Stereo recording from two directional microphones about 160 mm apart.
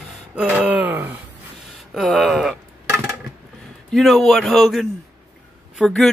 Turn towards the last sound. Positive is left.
turn(degrees=5)  # may be behind; listen again after turning